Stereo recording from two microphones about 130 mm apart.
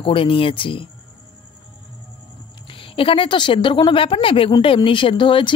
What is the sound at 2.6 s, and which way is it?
A woman's voice, 40° left (ahead or behind).